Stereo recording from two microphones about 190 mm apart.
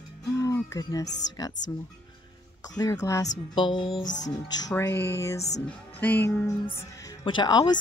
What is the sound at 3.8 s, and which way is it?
Speech, 25° left (ahead or behind).